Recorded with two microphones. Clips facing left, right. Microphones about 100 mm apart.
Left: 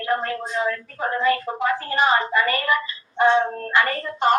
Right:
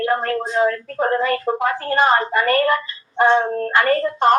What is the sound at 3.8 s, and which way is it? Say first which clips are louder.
Speech: right 5 dB; 50° right (ahead or behind).